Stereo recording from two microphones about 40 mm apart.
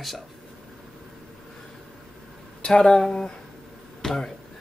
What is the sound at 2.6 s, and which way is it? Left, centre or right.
Speech, centre.